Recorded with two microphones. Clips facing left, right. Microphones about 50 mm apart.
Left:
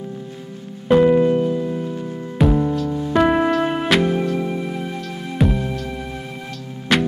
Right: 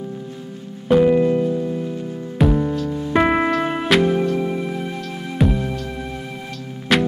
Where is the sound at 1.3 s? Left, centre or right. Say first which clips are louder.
Even; left.